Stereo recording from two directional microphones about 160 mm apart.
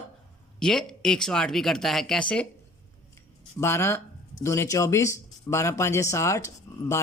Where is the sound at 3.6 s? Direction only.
15° left (ahead or behind).